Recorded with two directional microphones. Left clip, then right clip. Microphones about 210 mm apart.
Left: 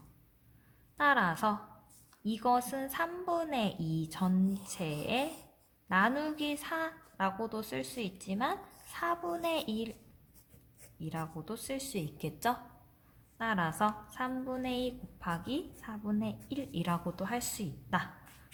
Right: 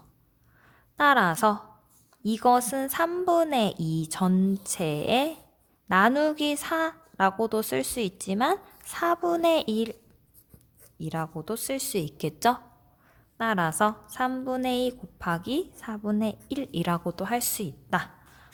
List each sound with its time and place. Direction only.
0.9 s a woman's voice: 50° right (ahead or behind)
11.0 s a woman's voice: 50° right (ahead or behind)